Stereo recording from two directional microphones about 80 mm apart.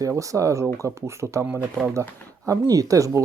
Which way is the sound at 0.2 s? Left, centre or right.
Right.